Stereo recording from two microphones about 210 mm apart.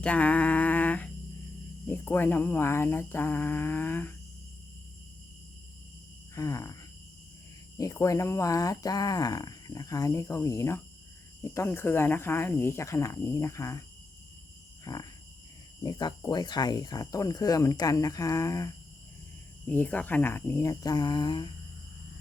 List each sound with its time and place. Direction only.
0.0 s a sound: 5° left (ahead or behind)
1.9 s speech: 10° left (ahead or behind)
6.3 s speech: 15° left (ahead or behind)
7.8 s speech: 15° left (ahead or behind)
14.9 s speech: 15° left (ahead or behind)